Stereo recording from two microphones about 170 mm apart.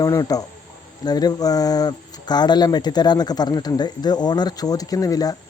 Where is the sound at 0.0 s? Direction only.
20° left (ahead or behind).